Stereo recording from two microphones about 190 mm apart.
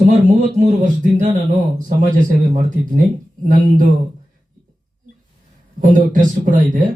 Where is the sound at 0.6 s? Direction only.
40° right (ahead or behind).